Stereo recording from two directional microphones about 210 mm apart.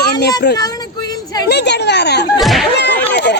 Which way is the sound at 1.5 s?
55° left (ahead or behind).